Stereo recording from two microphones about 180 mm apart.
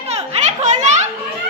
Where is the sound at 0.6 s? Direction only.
40° right (ahead or behind).